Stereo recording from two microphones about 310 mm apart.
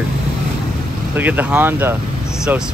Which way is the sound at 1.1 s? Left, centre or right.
Centre.